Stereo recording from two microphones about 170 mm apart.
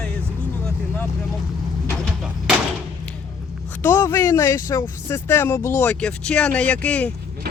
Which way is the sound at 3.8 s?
15° left (ahead or behind).